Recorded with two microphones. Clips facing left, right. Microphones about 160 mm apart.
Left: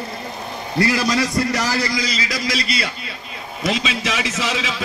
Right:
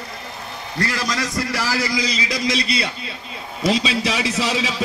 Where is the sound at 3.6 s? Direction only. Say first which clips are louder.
Right 3 dB; 35° right (ahead or behind).